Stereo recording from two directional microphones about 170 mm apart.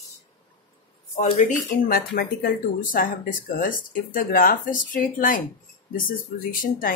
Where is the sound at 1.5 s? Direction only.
55° left (ahead or behind).